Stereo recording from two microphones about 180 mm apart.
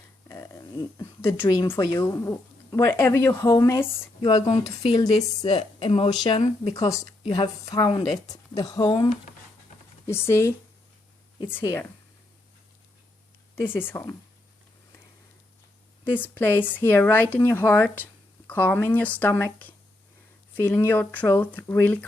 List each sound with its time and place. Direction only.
0.3 s speech: 15° left (ahead or behind)
4.2 s speech: 25° left (ahead or behind)
10.1 s speech: 15° left (ahead or behind)
13.6 s speech: 10° left (ahead or behind)
16.0 s speech: 10° left (ahead or behind)
20.6 s speech: 10° left (ahead or behind)